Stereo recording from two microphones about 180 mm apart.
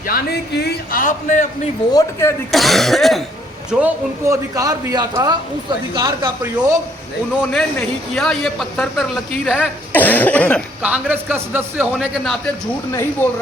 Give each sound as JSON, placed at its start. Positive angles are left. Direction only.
{"t": 0.1, "sound": "a man's voice", "side_deg": 60}
{"t": 1.9, "sound": "speech", "side_deg": 20}
{"t": 2.5, "sound": "a man's voice", "side_deg": 0}
{"t": 7.5, "sound": "speech", "side_deg": 0}
{"t": 10.8, "sound": "a man's voice", "side_deg": -10}
{"t": 12.9, "sound": "speech", "side_deg": 15}